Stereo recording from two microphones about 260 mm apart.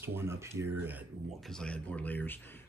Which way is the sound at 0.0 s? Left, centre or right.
Centre.